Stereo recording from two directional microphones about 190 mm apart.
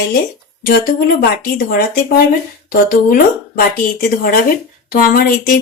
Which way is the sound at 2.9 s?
50° left (ahead or behind).